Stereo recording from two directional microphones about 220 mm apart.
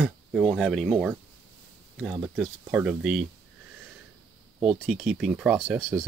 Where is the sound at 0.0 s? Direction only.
Centre (ahead or behind).